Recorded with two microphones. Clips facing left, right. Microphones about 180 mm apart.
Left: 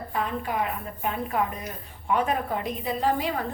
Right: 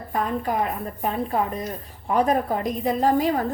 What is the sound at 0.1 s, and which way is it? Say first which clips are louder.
A woman's voice: right 5 dB; 40° right (ahead or behind).